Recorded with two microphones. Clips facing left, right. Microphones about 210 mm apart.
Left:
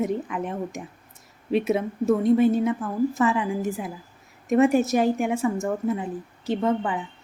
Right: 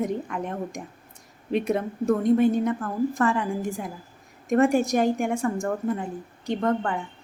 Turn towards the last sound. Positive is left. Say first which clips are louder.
# left 1 dB
turn(degrees=5)  # may be behind; listen again after turning